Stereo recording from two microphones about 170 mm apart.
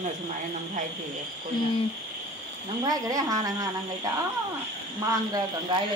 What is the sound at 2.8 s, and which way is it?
Speech, 20° right (ahead or behind).